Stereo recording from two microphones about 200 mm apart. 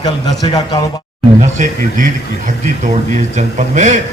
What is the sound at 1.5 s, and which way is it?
Speech, 40° right (ahead or behind).